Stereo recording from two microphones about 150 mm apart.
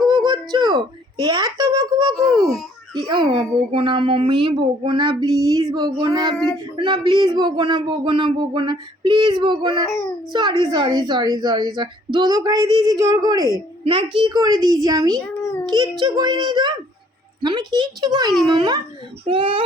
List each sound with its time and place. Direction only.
0.1 s a sound: 30° right (ahead or behind)
1.2 s a child's voice: 25° right (ahead or behind)
13.8 s a child's voice: 35° right (ahead or behind)